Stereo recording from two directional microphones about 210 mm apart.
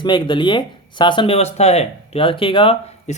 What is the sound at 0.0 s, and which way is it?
Speech, 20° left (ahead or behind).